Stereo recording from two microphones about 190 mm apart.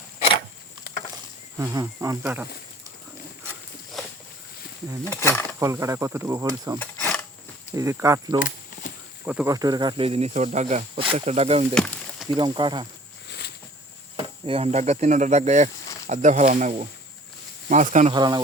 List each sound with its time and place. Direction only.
1.5 s speech: 15° right (ahead or behind)
5.0 s speech: 15° left (ahead or behind)
5.5 s speech: 15° right (ahead or behind)
7.8 s speech: 15° right (ahead or behind)
8.4 s a sound: 45° left (ahead or behind)
9.2 s speech: 10° right (ahead or behind)
9.5 s speech: 20° right (ahead or behind)
11.7 s a sound: 5° left (ahead or behind)
12.3 s speech: 25° right (ahead or behind)
13.2 s a sound: 60° left (ahead or behind)
14.4 s speech: 30° right (ahead or behind)
18.1 s speech: 20° right (ahead or behind)